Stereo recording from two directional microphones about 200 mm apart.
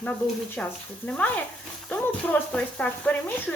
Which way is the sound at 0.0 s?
5° left (ahead or behind).